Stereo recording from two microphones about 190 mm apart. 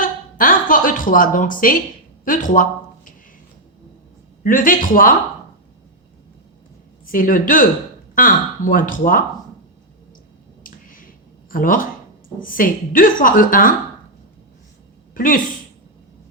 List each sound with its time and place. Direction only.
0.0 s a sound: 45° left (ahead or behind)
2.2 s speech: 45° left (ahead or behind)
4.4 s speech: 45° left (ahead or behind)
7.0 s speech: 45° left (ahead or behind)
10.6 s finger snapping: 45° left (ahead or behind)
11.5 s speech: 45° left (ahead or behind)
15.1 s speech: 45° left (ahead or behind)